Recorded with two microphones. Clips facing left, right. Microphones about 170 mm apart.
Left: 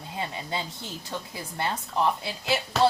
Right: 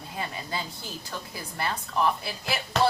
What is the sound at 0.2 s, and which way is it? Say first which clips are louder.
A woman's voice: left 1 dB; 25° left (ahead or behind).